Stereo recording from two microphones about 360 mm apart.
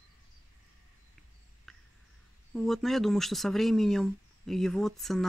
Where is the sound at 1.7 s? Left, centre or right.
Centre.